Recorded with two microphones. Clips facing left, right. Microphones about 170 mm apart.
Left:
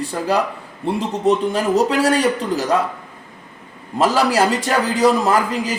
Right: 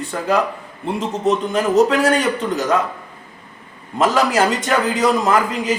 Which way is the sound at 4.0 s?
35° left (ahead or behind).